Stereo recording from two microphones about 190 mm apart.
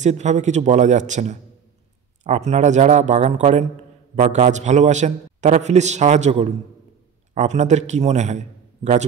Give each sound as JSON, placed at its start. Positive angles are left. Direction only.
{"t": 0.0, "sound": "a man's voice", "side_deg": -40}